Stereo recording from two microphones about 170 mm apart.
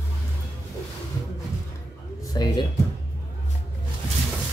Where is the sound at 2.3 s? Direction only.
25° left (ahead or behind).